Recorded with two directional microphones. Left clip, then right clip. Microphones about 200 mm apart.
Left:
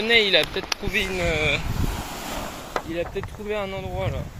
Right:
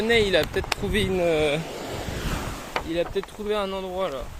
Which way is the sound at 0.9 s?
55° right (ahead or behind).